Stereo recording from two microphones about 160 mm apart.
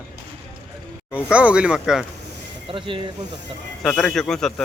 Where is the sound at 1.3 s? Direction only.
10° right (ahead or behind).